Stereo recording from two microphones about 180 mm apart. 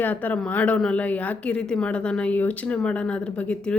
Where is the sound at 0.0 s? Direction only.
10° left (ahead or behind).